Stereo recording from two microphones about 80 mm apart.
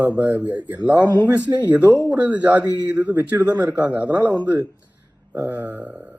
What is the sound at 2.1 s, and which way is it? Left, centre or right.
Speech, centre.